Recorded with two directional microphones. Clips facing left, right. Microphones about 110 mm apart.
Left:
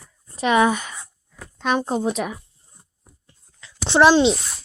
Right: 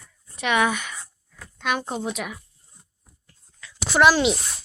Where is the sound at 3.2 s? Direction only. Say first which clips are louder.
Right 2 dB; 25° left (ahead or behind).